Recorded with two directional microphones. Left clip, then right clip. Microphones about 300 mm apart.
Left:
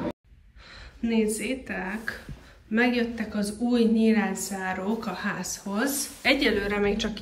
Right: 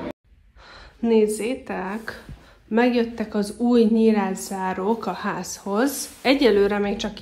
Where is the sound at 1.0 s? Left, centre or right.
Centre.